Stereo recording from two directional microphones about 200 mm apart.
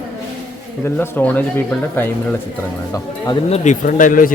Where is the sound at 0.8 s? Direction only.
10° left (ahead or behind).